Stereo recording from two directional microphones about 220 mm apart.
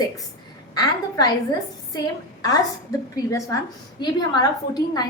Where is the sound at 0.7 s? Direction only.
15° left (ahead or behind).